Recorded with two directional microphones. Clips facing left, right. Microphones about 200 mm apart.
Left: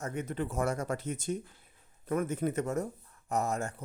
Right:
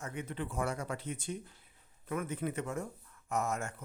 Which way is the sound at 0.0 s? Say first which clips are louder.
Left 5 dB; 45° left (ahead or behind).